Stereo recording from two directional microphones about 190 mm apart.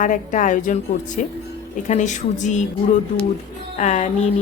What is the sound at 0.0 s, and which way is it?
A woman's voice, 45° left (ahead or behind).